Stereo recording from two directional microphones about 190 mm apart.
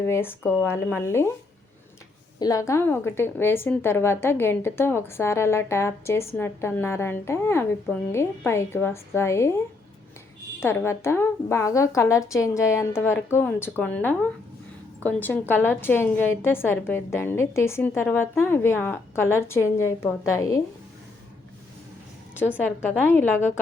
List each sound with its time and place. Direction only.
0.0 s a woman's voice: 10° left (ahead or behind)
2.4 s a woman's voice: 20° left (ahead or behind)
10.6 s a woman's voice: 10° left (ahead or behind)